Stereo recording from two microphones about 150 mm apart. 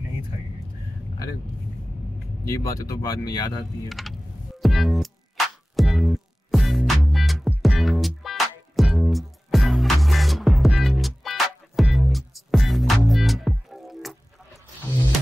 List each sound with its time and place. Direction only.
2.4 s speech: 20° left (ahead or behind)
4.0 s a sound: centre (ahead or behind)
4.6 s music: centre (ahead or behind)